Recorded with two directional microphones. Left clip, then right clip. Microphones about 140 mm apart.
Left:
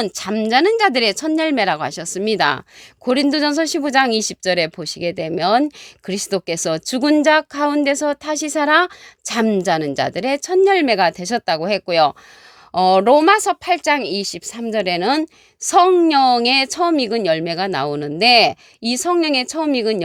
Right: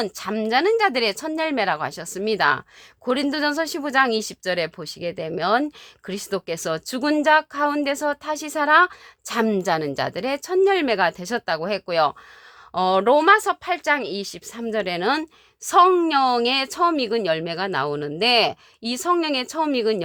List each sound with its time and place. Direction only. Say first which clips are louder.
0.0 s speech: left 4 dB; 55° left (ahead or behind); by 20.0 s 35° left (ahead or behind)